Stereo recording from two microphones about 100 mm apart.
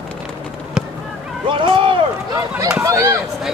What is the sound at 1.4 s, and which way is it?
Boat, 55° right (ahead or behind).